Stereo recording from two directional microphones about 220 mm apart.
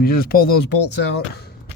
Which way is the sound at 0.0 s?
40° left (ahead or behind).